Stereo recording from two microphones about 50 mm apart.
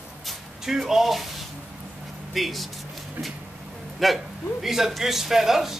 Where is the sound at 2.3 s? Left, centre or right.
Centre.